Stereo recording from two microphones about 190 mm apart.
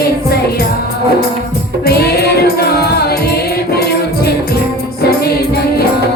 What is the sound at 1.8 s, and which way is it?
Music, 55° left (ahead or behind).